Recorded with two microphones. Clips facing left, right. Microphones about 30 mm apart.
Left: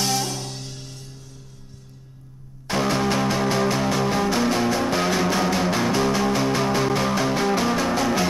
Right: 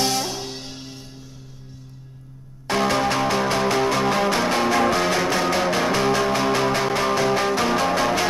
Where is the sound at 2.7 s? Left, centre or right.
Centre.